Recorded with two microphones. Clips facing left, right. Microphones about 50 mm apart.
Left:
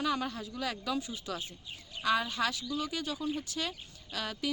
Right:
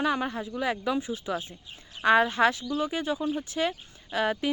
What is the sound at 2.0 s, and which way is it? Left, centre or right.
Speech, right.